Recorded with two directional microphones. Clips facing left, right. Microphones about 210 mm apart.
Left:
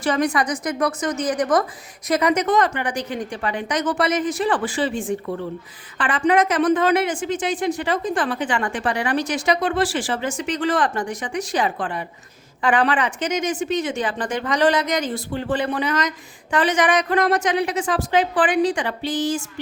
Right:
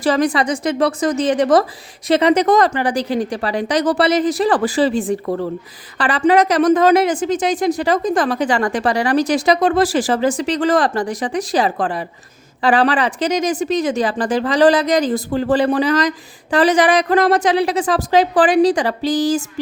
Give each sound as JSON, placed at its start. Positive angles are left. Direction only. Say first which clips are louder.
{"t": 0.0, "sound": "a woman's voice", "louder": "right 4 dB", "side_deg": -30}